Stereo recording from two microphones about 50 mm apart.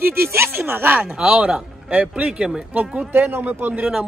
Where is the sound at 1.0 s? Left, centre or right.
Right.